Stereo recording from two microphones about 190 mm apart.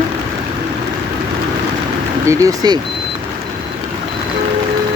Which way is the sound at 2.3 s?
15° right (ahead or behind).